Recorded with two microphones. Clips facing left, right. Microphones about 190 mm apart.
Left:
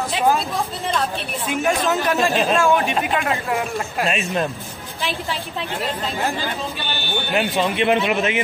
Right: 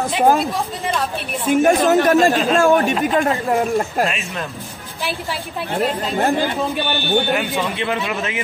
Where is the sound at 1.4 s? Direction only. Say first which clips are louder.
Right 7 dB; 45° right (ahead or behind).